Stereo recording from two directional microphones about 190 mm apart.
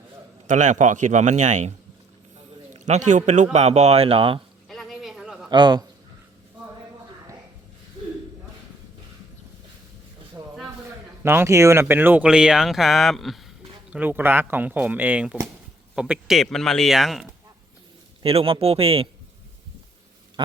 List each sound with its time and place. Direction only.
0.4 s speech: 40° right (ahead or behind)
2.7 s speech: 35° right (ahead or behind)
4.7 s a sound: centre (ahead or behind)
5.5 s a man's voice: 25° right (ahead or behind)
10.8 s speech: 10° right (ahead or behind)
18.2 s speech: 30° right (ahead or behind)